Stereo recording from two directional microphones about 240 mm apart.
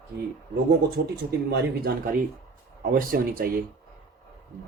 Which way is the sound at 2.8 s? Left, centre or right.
Right.